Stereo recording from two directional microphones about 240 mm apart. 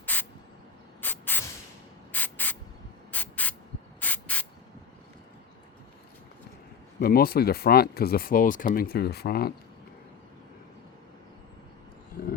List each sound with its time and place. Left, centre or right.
0.0 s a sound: centre
1.0 s spray: centre
7.0 s speech: left